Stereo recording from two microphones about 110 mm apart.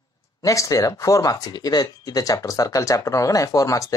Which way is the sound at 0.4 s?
30° left (ahead or behind).